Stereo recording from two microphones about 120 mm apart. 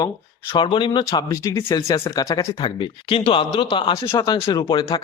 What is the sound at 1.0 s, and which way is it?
Speech, 25° left (ahead or behind).